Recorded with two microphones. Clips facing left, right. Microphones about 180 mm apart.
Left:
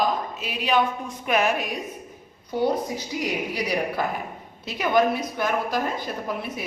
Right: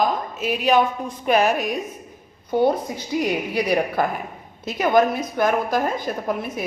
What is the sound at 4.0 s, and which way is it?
A woman's voice, 50° right (ahead or behind).